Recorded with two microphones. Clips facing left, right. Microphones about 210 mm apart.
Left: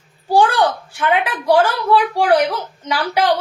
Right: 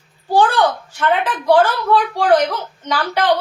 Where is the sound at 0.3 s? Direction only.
10° left (ahead or behind).